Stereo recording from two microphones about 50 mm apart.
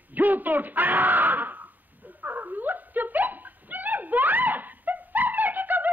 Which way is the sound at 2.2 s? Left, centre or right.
Right.